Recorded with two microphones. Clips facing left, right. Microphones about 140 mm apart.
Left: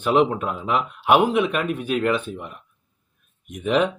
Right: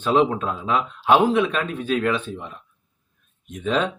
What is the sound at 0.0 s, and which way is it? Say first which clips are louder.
A man's voice: even; 10° left (ahead or behind).